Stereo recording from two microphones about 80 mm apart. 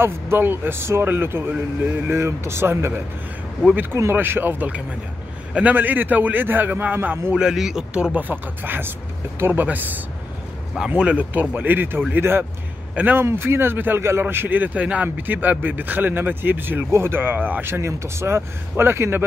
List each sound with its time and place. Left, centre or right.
0.0 s speech: right
4.1 s speech: right
7.3 s speech: centre; by 19.2 s right